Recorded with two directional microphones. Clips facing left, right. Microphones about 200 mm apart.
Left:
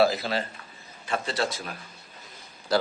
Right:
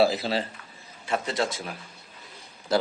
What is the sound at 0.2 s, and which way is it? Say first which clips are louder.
A man's voice: right 2 dB; 30° right (ahead or behind).